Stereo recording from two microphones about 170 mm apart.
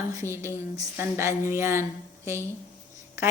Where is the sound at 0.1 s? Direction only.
15° right (ahead or behind).